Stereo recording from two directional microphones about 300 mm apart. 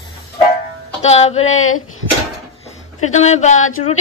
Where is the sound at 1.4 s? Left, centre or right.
Left.